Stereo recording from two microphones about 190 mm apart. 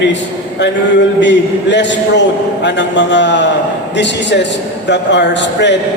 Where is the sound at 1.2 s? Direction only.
65° left (ahead or behind).